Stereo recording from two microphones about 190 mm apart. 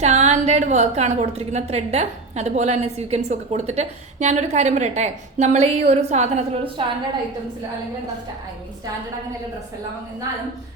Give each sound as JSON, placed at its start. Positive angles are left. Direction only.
{"t": 0.0, "sound": "a woman's voice", "side_deg": -35}